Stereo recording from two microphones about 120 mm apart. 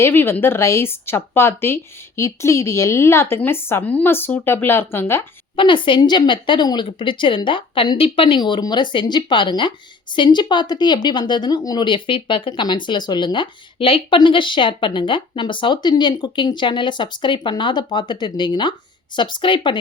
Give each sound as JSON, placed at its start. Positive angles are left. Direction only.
{"t": 0.0, "sound": "speech", "side_deg": 20}
{"t": 5.5, "sound": "speech", "side_deg": 45}